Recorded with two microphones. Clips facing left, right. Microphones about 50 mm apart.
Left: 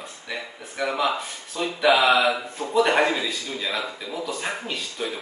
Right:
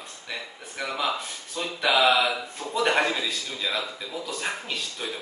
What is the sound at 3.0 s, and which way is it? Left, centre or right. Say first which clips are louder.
Speech: left 3 dB; centre.